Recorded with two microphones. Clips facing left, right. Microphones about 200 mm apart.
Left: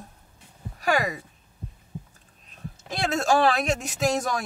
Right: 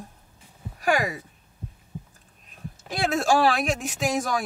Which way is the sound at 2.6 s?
Centre (ahead or behind).